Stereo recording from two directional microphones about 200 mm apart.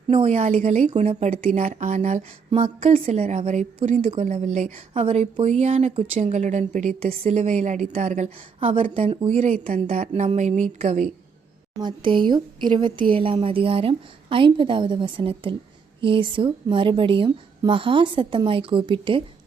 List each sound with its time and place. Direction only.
0.1 s a woman's voice: 30° right (ahead or behind)
11.8 s speech: 25° right (ahead or behind)